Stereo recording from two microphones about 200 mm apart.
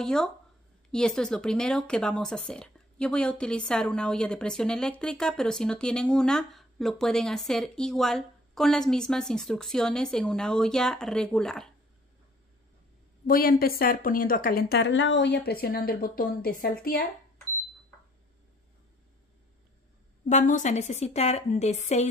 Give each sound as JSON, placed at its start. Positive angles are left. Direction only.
{"t": 0.0, "sound": "speech", "side_deg": 5}
{"t": 13.3, "sound": "a woman's voice", "side_deg": 45}
{"t": 20.2, "sound": "a woman's voice", "side_deg": 40}